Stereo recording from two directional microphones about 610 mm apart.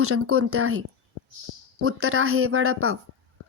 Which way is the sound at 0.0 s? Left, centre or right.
Right.